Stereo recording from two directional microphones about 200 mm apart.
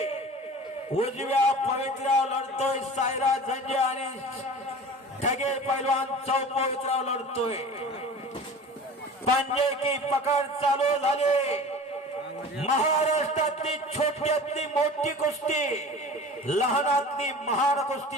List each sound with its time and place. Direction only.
0.9 s a man's voice: 30° left (ahead or behind)
5.2 s a man's voice: 35° left (ahead or behind)
9.5 s a man's voice: 30° left (ahead or behind)
12.6 s a man's voice: 35° left (ahead or behind)